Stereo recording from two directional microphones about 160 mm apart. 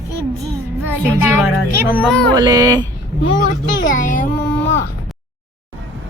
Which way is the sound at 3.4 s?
55° left (ahead or behind).